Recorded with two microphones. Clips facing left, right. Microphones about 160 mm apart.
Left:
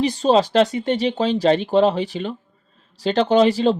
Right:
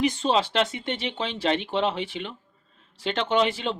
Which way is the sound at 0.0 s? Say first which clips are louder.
Left 6 dB; 35° left (ahead or behind).